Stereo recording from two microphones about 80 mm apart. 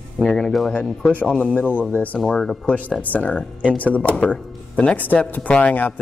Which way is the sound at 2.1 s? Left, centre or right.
Centre.